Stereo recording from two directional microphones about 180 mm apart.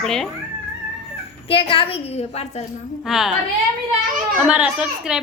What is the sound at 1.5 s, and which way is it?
A woman's voice, 30° left (ahead or behind).